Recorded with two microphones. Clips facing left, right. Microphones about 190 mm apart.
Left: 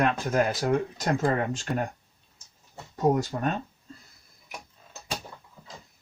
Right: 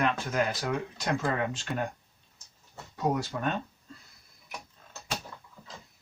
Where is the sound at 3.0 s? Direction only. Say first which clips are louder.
Left 5 dB; 40° left (ahead or behind).